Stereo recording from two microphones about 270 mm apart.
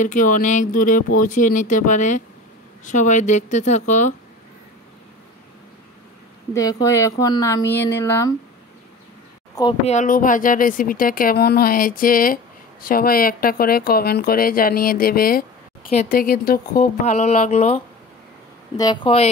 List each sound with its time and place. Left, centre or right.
0.0 s speech: left
6.5 s speech: centre
9.6 s speech: left